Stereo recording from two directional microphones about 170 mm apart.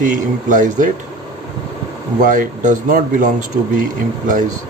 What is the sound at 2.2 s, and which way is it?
Speech, 50° right (ahead or behind).